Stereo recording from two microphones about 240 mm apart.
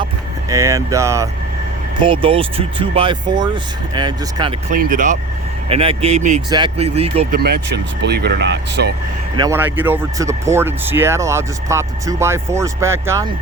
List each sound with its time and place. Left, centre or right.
0.5 s speech: centre
4.7 s speech: right
5.6 s speech: right
7.3 s speech: right
9.3 s speech: centre